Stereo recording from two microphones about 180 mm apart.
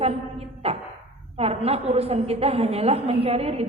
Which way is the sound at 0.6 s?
35° right (ahead or behind).